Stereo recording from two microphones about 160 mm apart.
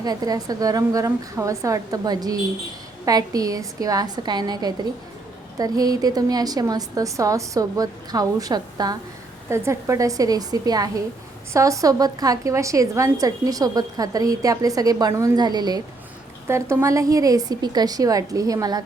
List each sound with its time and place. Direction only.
0.0 s a woman's voice: 25° right (ahead or behind)